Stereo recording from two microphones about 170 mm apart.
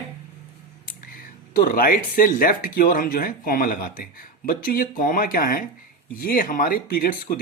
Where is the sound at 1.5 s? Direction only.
60° left (ahead or behind).